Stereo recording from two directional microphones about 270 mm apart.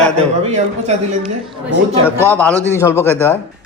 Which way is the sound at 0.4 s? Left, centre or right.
Right.